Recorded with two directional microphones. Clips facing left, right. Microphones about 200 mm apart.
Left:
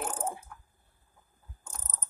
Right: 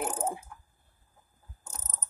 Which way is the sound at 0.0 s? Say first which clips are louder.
Right 3 dB; 5° right (ahead or behind).